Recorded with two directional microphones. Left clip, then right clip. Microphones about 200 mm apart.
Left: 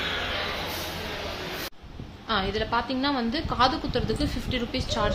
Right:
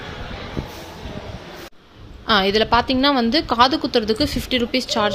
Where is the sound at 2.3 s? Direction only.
45° right (ahead or behind).